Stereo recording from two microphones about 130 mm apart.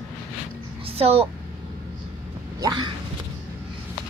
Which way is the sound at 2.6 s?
35° right (ahead or behind).